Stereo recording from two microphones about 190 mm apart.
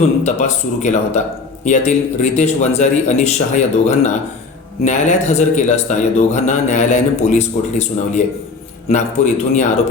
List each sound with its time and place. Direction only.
0.3 s speech: 40° left (ahead or behind)